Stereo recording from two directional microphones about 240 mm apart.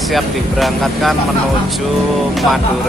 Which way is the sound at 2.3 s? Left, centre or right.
Centre.